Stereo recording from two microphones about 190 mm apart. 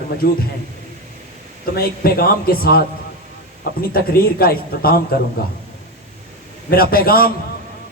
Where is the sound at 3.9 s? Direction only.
50° left (ahead or behind).